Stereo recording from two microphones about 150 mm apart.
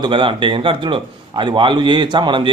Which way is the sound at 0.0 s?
35° right (ahead or behind).